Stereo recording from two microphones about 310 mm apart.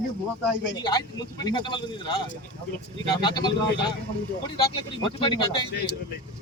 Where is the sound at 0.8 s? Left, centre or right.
Centre.